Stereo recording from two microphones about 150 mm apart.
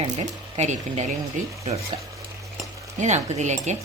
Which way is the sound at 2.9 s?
50° right (ahead or behind).